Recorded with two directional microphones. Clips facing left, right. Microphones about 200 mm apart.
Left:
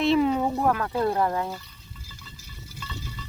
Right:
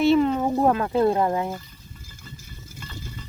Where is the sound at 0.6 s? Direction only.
25° right (ahead or behind).